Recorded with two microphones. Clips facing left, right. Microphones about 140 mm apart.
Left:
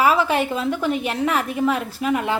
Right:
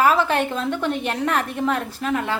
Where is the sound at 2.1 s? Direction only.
15° left (ahead or behind).